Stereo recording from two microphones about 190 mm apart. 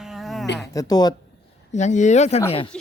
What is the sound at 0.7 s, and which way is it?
Speech, 20° left (ahead or behind).